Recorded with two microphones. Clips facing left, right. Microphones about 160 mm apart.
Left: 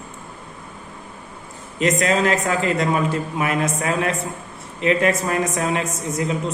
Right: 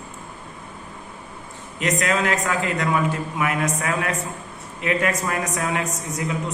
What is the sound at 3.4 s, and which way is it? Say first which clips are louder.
A woman's voice: left 1 dB; 30° left (ahead or behind).